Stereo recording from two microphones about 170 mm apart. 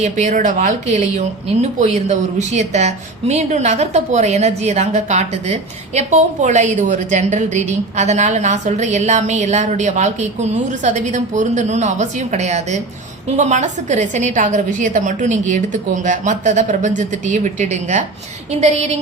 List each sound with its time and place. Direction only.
0.0 s speech: 40° right (ahead or behind)
2.5 s a woman's voice: 40° right (ahead or behind)